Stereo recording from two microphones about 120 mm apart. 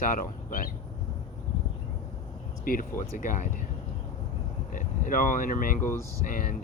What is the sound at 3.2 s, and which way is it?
Speech, 90° left.